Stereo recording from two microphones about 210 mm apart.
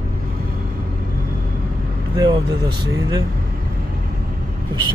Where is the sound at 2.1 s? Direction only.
20° right (ahead or behind).